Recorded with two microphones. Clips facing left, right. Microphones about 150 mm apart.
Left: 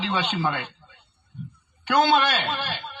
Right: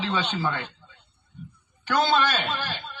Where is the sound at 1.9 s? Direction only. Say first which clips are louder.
Left 3 dB; 20° left (ahead or behind).